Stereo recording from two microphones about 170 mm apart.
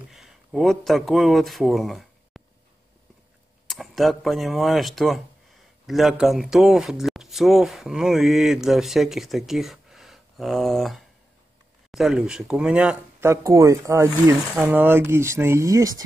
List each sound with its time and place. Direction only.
0.1 s speech: centre (ahead or behind)
3.6 s speech: centre (ahead or behind)
13.3 s speech: 20° right (ahead or behind)